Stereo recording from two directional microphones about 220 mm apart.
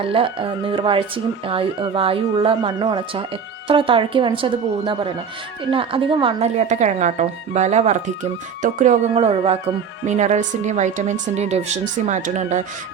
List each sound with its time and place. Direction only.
0.0 s speech: 25° right (ahead or behind)